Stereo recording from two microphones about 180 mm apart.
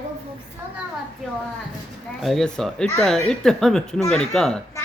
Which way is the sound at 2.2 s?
Centre (ahead or behind).